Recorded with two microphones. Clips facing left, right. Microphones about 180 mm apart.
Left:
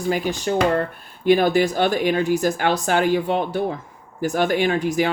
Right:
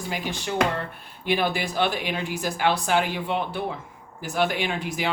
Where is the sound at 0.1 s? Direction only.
45° left (ahead or behind).